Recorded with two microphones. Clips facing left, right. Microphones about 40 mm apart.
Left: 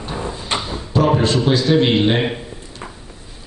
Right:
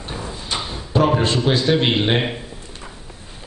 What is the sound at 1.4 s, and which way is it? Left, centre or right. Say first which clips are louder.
Speech: left 3 dB; centre.